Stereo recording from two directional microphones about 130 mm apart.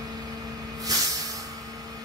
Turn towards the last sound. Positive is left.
turn(degrees=-30)  # may be behind; listen again after turning